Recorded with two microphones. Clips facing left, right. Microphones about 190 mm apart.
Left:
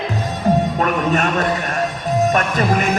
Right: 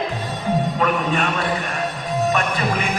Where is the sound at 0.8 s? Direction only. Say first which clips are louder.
Left 2 dB; 45° left (ahead or behind).